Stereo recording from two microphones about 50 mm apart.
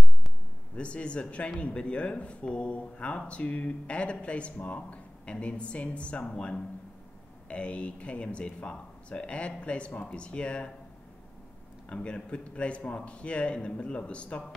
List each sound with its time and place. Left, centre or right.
0.7 s speech: left
7.4 s speech: left
11.9 s speech: left